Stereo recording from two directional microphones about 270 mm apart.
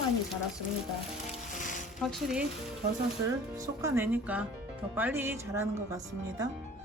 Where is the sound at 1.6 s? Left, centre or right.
Left.